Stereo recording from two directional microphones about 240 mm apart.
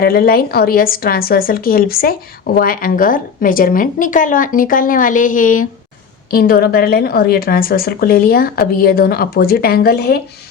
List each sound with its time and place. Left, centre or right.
0.0 s a woman's voice: left